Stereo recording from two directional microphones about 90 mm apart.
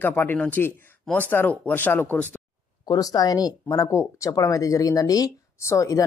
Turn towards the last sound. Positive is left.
turn(degrees=35)  # may be behind; listen again after turning